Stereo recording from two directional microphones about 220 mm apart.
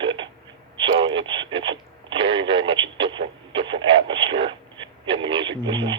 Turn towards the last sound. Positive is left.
turn(degrees=-20)  # may be behind; listen again after turning